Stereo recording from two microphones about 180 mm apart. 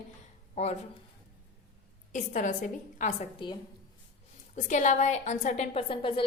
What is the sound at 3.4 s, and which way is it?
Speech, 25° left (ahead or behind).